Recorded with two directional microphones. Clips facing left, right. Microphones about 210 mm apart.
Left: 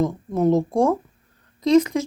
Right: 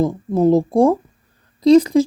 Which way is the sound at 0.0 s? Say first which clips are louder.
Right 4 dB; 30° right (ahead or behind).